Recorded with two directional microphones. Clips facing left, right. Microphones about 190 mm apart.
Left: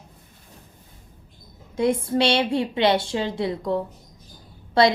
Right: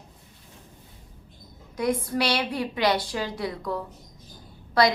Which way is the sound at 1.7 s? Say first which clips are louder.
Left 4 dB; 25° left (ahead or behind).